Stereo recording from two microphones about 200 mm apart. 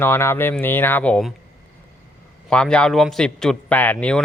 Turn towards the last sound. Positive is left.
turn(degrees=5)  # may be behind; listen again after turning